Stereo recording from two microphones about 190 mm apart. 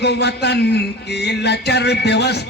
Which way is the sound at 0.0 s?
60° left (ahead or behind).